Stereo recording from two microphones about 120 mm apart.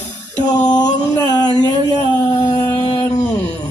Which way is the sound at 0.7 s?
35° left (ahead or behind).